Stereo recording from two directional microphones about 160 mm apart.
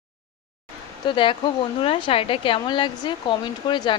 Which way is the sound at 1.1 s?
30° left (ahead or behind).